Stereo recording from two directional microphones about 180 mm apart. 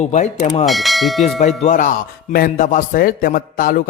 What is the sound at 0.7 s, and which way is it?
Speech, centre (ahead or behind).